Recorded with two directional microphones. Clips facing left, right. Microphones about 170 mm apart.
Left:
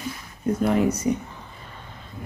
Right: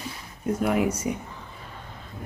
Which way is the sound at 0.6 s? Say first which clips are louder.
Left 3 dB; 10° right (ahead or behind).